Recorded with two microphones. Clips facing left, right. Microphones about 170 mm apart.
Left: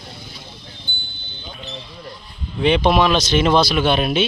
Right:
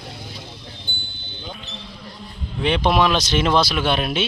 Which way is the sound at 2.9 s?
Centre (ahead or behind).